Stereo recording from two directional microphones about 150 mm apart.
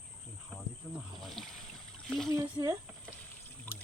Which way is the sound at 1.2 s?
Centre (ahead or behind).